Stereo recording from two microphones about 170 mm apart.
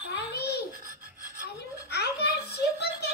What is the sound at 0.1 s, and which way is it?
Babbling, 75° left (ahead or behind).